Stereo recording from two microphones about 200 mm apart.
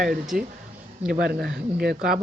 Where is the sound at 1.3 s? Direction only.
50° right (ahead or behind).